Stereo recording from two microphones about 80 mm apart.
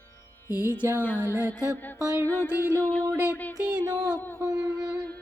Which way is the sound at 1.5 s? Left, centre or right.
Left.